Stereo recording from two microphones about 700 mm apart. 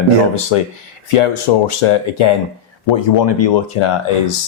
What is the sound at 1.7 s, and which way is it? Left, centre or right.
Speech, left.